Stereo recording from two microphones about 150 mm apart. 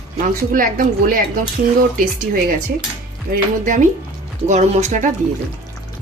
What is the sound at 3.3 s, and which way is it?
Speech, 60° right (ahead or behind).